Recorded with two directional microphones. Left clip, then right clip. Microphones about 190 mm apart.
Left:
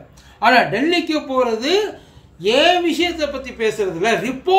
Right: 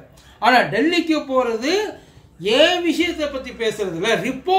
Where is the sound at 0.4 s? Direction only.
10° left (ahead or behind).